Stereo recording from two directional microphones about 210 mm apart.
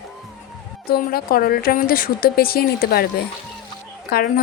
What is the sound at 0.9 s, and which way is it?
A woman's voice, 45° left (ahead or behind).